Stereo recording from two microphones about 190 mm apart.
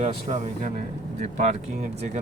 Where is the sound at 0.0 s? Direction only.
40° right (ahead or behind).